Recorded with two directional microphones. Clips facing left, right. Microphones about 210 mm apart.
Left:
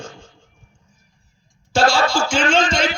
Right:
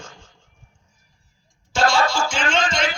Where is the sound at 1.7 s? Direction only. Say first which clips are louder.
Left 3 dB; 30° left (ahead or behind).